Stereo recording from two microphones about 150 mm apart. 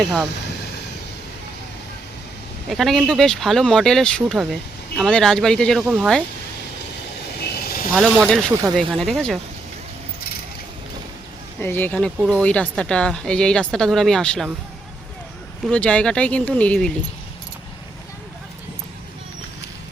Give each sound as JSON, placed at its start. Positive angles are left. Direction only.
{"t": 0.0, "sound": "speech", "side_deg": 0}
{"t": 2.6, "sound": "speech", "side_deg": 0}
{"t": 7.5, "sound": "a sound", "side_deg": 90}
{"t": 7.9, "sound": "speech", "side_deg": 0}
{"t": 11.6, "sound": "speech", "side_deg": 15}
{"t": 15.7, "sound": "speech", "side_deg": 10}